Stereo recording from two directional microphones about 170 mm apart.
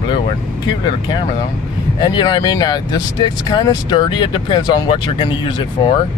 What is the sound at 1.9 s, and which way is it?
Speech, 25° left (ahead or behind).